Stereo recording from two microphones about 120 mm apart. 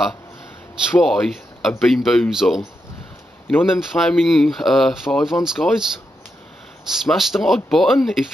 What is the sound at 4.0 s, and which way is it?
Speech, centre (ahead or behind).